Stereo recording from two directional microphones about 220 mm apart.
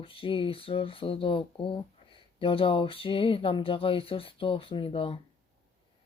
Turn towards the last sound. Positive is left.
turn(degrees=25)  # may be behind; listen again after turning